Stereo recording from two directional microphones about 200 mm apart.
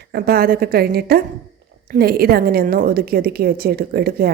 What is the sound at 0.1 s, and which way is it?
A woman's voice, 50° right (ahead or behind).